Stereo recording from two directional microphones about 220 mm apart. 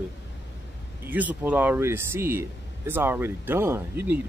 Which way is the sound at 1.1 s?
5° right (ahead or behind).